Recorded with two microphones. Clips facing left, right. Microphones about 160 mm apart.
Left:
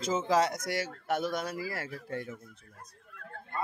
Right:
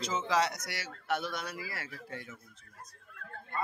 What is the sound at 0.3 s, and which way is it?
A man's voice, 50° left (ahead or behind).